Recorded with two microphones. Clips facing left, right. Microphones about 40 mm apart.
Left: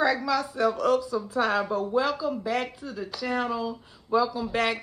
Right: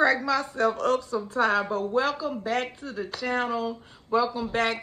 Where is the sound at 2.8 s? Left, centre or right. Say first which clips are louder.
Right 1 dB; right.